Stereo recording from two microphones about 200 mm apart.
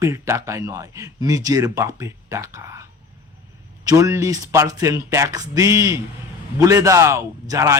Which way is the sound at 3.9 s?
15° right (ahead or behind).